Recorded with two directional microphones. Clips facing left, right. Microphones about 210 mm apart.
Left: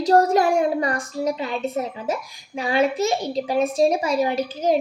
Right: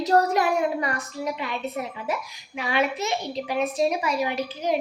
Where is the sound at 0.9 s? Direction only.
45° left (ahead or behind).